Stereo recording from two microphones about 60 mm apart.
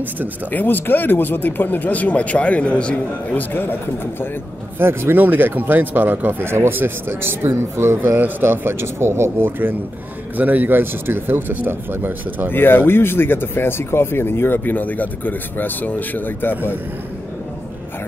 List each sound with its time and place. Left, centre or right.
0.5 s speech: left
3.3 s speech: left
4.7 s speech: right
10.3 s speech: right
12.4 s speech: left